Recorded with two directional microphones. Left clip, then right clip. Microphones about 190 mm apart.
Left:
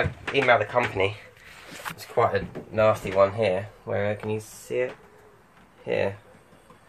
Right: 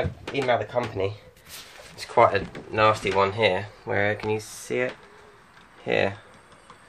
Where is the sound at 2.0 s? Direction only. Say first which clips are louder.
Right 4 dB; 15° right (ahead or behind).